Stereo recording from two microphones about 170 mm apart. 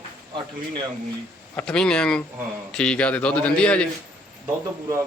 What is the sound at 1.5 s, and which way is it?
A man's voice, 5° left (ahead or behind).